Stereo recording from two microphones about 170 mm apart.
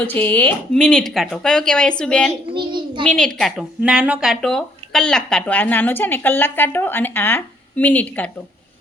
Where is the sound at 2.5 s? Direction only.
30° right (ahead or behind).